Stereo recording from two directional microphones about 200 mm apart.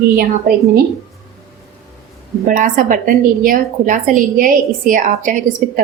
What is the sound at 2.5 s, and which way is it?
A woman's voice, 40° right (ahead or behind).